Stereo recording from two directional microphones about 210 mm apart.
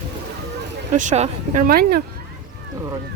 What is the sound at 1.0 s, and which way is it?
Speech, 35° right (ahead or behind).